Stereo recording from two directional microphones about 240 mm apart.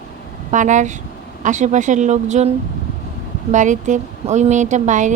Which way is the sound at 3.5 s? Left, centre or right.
Right.